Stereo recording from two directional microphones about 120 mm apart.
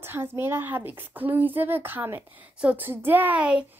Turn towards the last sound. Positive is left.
turn(degrees=-10)  # may be behind; listen again after turning